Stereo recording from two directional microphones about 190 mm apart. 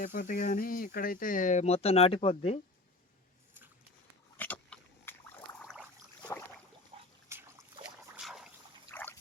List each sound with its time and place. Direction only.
0.0 s speech: 45° left (ahead or behind); by 2.6 s 30° left (ahead or behind)
4.4 s pig: 10° left (ahead or behind)
5.5 s a sound: centre (ahead or behind)
6.9 s water: 30° right (ahead or behind)
7.3 s trickle: 15° right (ahead or behind)
7.9 s boat: 5° right (ahead or behind)
8.9 s boat: 10° left (ahead or behind)